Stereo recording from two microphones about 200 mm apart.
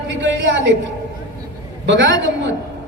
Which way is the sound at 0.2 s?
65° right (ahead or behind).